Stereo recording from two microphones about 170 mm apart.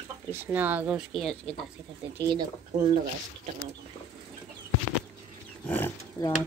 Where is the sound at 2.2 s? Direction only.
25° right (ahead or behind).